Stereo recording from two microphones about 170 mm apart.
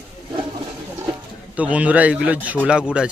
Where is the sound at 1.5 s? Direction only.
10° right (ahead or behind).